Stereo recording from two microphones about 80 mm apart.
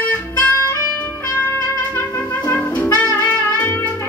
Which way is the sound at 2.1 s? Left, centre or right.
Left.